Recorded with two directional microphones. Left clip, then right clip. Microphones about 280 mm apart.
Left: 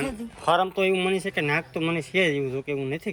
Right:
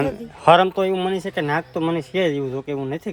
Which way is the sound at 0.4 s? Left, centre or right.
Right.